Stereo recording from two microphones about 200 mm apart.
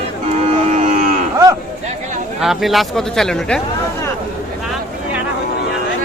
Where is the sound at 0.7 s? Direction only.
40° right (ahead or behind).